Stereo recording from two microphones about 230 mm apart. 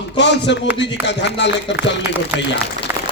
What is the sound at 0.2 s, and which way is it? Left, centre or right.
Speech, left.